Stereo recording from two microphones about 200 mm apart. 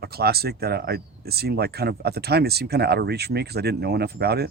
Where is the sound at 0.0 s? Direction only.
50° right (ahead or behind).